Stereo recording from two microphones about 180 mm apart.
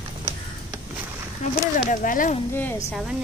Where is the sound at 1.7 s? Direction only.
45° left (ahead or behind).